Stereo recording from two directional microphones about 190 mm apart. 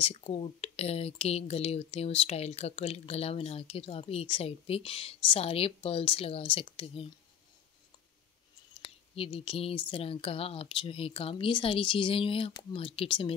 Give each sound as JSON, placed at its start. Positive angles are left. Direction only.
{"t": 0.0, "sound": "speech", "side_deg": 30}
{"t": 8.8, "sound": "speech", "side_deg": 30}